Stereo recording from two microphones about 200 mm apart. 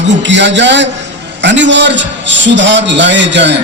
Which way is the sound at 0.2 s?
60° right (ahead or behind).